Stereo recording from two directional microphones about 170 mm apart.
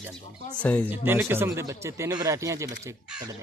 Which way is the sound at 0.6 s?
10° left (ahead or behind).